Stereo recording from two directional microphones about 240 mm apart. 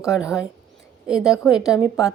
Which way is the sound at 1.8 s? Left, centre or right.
Centre.